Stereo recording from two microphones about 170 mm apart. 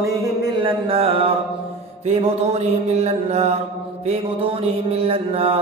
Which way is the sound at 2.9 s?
40° right (ahead or behind).